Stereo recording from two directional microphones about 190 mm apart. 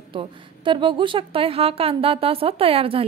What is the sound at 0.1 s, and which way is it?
A woman's voice, 25° right (ahead or behind).